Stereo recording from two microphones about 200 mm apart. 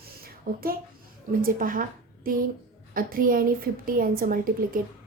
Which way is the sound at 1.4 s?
45° right (ahead or behind).